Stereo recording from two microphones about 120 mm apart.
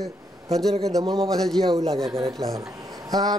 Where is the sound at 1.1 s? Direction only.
5° left (ahead or behind).